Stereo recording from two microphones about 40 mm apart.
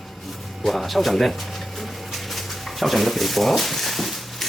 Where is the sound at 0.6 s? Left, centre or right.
Centre.